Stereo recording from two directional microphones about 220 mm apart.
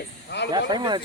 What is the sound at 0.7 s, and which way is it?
Speech, 20° right (ahead or behind).